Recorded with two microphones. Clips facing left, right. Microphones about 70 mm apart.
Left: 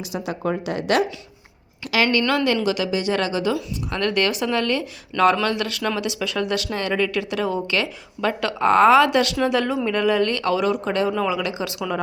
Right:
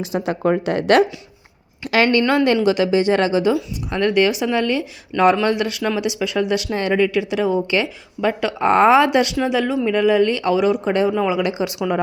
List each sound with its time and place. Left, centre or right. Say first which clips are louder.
0.0 s speech: right 6 dB; right
2.2 s speech: right 4 dB; right; by 11.4 s centre
11.4 s speech: right 5 dB; right